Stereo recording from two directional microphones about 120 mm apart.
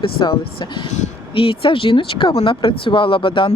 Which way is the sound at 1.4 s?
45° left (ahead or behind).